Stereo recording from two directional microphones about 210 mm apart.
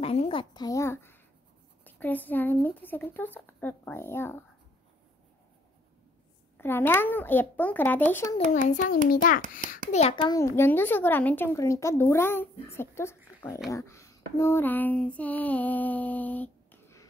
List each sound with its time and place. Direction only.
0.0 s a child's voice: 25° left (ahead or behind); by 4.4 s 10° left (ahead or behind)
6.6 s a woman's voice: 10° left (ahead or behind)
8.6 s a child's voice: 40° left (ahead or behind)
9.8 s a child's voice: 30° left (ahead or behind)
10.3 s a woman's voice: 10° left (ahead or behind)